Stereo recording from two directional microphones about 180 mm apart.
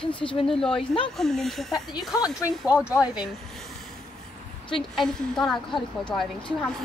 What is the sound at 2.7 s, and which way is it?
Speech, 5° right (ahead or behind).